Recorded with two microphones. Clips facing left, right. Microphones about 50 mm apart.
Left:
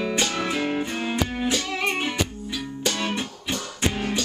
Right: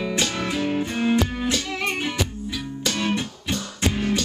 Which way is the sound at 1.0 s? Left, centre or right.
Centre.